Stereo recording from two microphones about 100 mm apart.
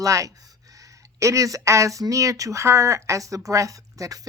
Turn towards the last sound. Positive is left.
turn(degrees=-35)  # may be behind; listen again after turning